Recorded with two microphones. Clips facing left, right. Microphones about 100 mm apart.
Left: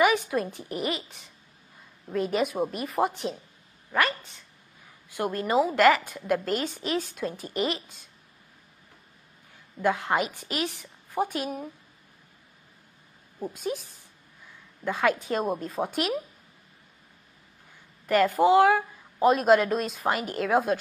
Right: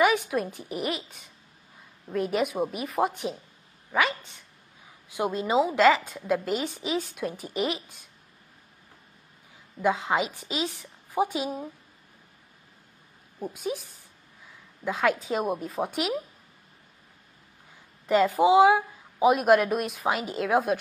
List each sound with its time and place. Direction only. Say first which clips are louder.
0.3 s a woman's voice: even; centre (ahead or behind)
5.1 s a woman's voice: even; 15° right (ahead or behind)
9.8 s a woman's voice: even; 10° right (ahead or behind)
13.4 s a woman's voice: even; 10° right (ahead or behind)
14.9 s a woman's voice: even; 5° right (ahead or behind)
18.0 s a woman's voice: even; 15° right (ahead or behind)